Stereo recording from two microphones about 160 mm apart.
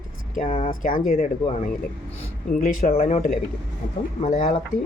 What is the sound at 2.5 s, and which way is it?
Speech, 55° left (ahead or behind).